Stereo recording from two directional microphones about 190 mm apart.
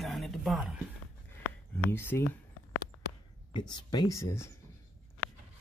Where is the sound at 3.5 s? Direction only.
25° left (ahead or behind).